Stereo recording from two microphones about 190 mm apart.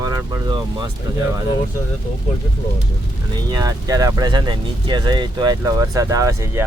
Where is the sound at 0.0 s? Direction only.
20° right (ahead or behind).